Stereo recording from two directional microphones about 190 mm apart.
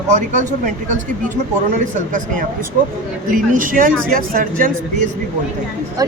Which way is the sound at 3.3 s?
45° right (ahead or behind).